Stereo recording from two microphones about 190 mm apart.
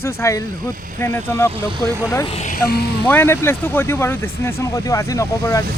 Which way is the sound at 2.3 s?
35° left (ahead or behind).